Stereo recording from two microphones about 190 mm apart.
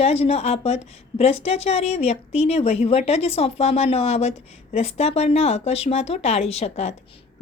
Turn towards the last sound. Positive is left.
turn(degrees=35)  # may be behind; listen again after turning